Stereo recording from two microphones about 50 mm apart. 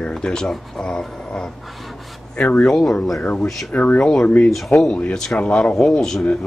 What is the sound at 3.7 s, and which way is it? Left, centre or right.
Speech, left.